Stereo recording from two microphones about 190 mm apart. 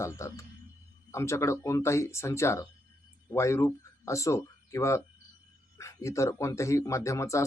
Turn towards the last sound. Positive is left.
turn(degrees=15)  # may be behind; listen again after turning